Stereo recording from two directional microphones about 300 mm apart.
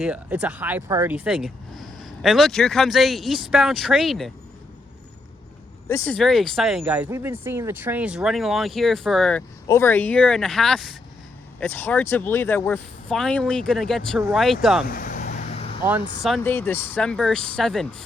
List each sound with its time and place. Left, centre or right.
0.0 s speech: centre
5.9 s speech: centre
14.8 s vehicle: left
16.2 s speech: centre